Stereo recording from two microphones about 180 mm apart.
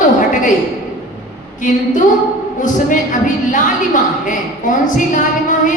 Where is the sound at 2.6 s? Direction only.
45° left (ahead or behind).